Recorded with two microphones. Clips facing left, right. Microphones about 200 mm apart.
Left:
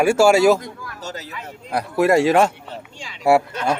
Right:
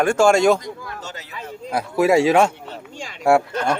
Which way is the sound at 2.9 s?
45° right (ahead or behind).